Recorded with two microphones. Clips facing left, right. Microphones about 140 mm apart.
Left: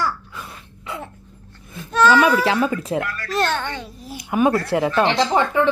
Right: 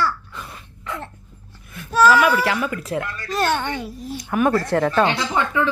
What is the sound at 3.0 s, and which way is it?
Speech, 20° right (ahead or behind).